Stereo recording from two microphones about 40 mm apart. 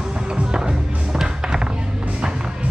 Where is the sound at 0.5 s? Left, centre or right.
Centre.